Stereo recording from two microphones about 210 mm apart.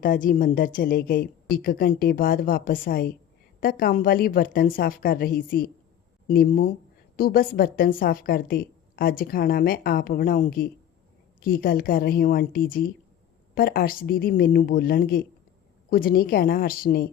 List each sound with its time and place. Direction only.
0.0 s a woman's voice: 40° left (ahead or behind)